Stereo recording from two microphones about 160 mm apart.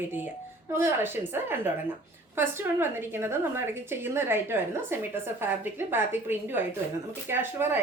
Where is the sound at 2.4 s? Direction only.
15° right (ahead or behind).